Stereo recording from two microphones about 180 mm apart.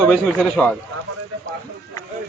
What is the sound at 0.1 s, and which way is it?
Speech, 5° left (ahead or behind).